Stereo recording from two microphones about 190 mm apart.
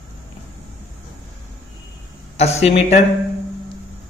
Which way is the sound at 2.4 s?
35° left (ahead or behind).